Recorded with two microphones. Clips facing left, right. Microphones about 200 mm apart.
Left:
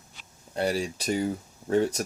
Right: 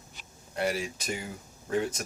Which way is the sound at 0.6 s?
35° left (ahead or behind).